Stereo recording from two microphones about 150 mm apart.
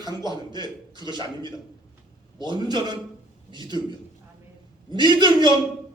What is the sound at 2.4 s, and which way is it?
Speech, 30° right (ahead or behind).